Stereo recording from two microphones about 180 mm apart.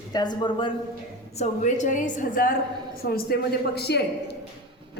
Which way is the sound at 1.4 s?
40° left (ahead or behind).